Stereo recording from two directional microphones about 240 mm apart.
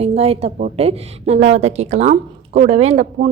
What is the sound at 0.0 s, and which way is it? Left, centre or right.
A woman's voice, right.